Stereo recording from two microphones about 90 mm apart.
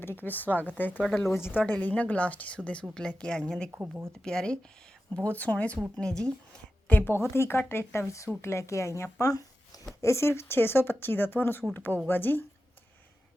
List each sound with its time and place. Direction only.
0.0 s speech: 25° left (ahead or behind)
1.0 s speech: 5° left (ahead or behind)
1.3 s speech: 25° left (ahead or behind)
1.6 s speech: 15° left (ahead or behind)
3.7 s speech: 30° right (ahead or behind)
4.2 s speech: 5° left (ahead or behind)
6.8 s a woman's voice: 20° left (ahead or behind)
9.1 s a sound: 40° left (ahead or behind)
10.0 s speech: 30° left (ahead or behind)